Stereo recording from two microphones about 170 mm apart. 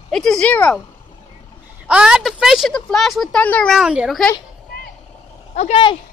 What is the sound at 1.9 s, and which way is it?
Speech, 5° right (ahead or behind).